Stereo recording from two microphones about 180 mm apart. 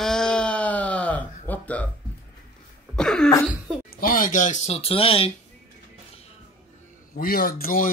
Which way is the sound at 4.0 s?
50° left (ahead or behind).